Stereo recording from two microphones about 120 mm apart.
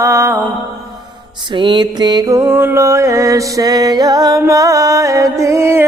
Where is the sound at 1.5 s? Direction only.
40° right (ahead or behind).